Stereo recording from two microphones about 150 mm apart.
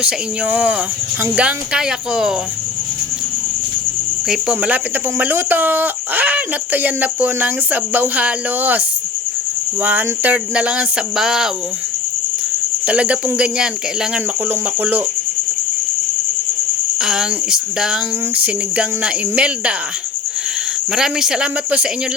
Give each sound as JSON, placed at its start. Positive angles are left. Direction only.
{"t": 0.0, "sound": "speech", "side_deg": -10}
{"t": 4.3, "sound": "speech", "side_deg": -5}
{"t": 12.8, "sound": "speech", "side_deg": -10}
{"t": 17.0, "sound": "speech", "side_deg": -5}
{"t": 20.9, "sound": "speech", "side_deg": -5}